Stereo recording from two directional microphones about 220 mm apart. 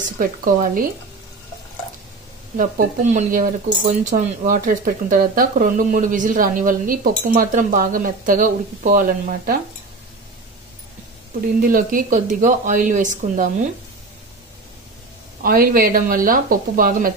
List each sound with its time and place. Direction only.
0.2 s speech: 40° right (ahead or behind)
2.5 s speech: 35° right (ahead or behind)
11.6 s speech: 40° right (ahead or behind)
15.4 s speech: 40° right (ahead or behind)